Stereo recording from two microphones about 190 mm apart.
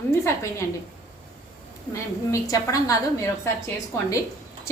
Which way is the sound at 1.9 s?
15° left (ahead or behind).